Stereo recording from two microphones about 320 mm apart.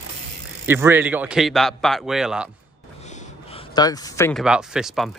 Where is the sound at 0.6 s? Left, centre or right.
Centre.